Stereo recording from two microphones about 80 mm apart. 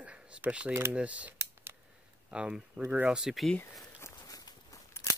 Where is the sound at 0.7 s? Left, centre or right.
Right.